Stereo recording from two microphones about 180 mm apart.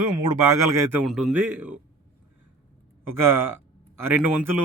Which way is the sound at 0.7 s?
15° right (ahead or behind).